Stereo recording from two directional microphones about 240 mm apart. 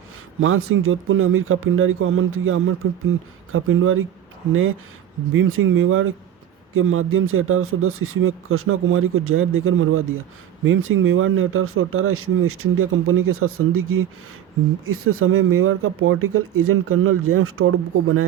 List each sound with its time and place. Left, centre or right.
0.3 s speech: right
5.3 s speech: right